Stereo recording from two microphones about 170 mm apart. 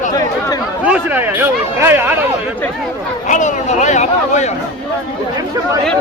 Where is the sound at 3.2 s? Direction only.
45° left (ahead or behind).